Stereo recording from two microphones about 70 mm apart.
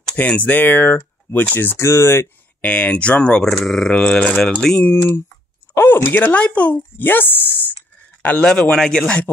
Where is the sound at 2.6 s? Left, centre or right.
Centre.